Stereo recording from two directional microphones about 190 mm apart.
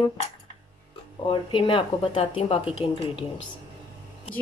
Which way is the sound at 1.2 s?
25° left (ahead or behind).